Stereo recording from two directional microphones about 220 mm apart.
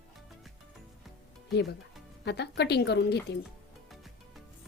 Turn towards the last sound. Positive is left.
turn(degrees=50)  # may be behind; listen again after turning